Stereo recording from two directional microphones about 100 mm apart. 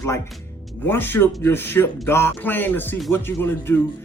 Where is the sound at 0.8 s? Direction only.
20° left (ahead or behind).